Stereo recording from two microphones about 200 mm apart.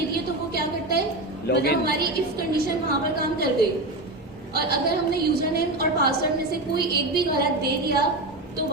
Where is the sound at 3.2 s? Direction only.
50° right (ahead or behind).